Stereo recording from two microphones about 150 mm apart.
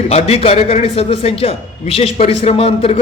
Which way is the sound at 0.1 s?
45° left (ahead or behind).